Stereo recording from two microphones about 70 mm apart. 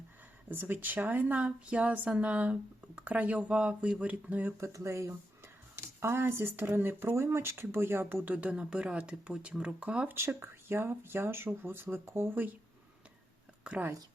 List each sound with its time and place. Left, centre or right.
0.4 s speech: right
4.6 s speech: right; by 10.1 s centre
10.1 s speech: right
13.7 s speech: centre